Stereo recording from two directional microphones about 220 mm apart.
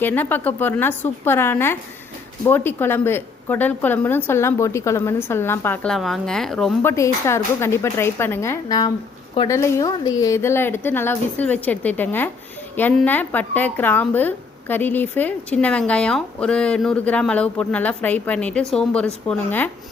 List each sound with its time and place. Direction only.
0.0 s a woman's voice: 10° left (ahead or behind)
6.9 s a woman's voice: 15° left (ahead or behind)